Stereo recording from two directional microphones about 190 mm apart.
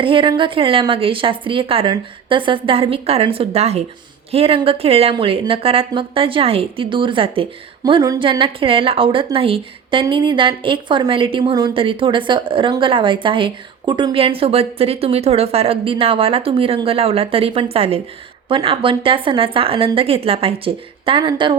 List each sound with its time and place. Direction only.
0.0 s speech: 25° right (ahead or behind)